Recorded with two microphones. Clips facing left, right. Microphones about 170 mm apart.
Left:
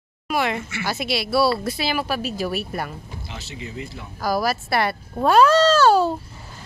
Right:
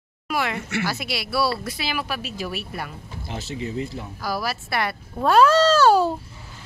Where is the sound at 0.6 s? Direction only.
70° right (ahead or behind).